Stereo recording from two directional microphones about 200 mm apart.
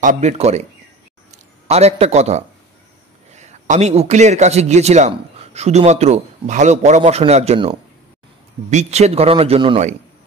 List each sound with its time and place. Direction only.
0.0 s a man's voice: 35° right (ahead or behind)